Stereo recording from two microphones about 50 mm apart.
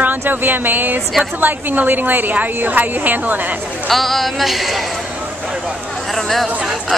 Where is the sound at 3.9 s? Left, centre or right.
Centre.